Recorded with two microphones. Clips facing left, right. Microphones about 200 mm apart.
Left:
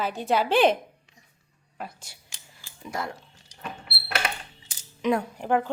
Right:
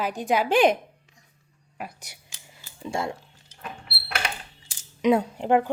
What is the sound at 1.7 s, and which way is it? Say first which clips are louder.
Cutlery: right 1 dB; 15° right (ahead or behind).